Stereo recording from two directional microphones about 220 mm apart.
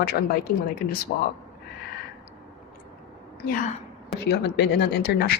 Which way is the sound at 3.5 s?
40° left (ahead or behind).